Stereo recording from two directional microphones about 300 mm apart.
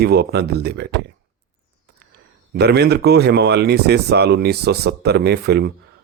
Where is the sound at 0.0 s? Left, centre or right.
Right.